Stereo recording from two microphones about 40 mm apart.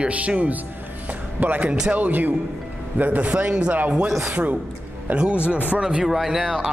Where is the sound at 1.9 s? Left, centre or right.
Right.